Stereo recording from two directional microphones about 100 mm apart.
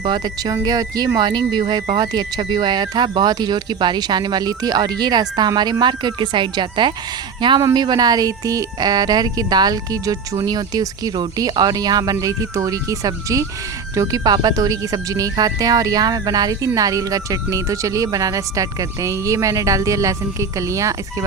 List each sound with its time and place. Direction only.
0.0 s speech: 45° right (ahead or behind)